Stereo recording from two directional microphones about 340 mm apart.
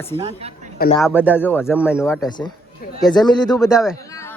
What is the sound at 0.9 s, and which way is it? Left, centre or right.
Speech, centre.